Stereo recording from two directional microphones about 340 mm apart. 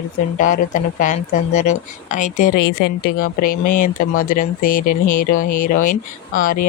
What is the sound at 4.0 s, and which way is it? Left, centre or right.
Speech, left.